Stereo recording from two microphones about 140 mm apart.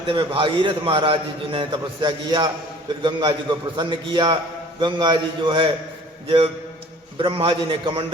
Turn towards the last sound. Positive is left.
turn(degrees=-35)  # may be behind; listen again after turning